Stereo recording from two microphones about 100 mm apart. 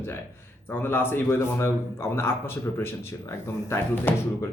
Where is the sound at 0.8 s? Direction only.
20° left (ahead or behind).